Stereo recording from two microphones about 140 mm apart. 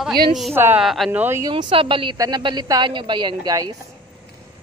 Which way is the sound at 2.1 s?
25° right (ahead or behind).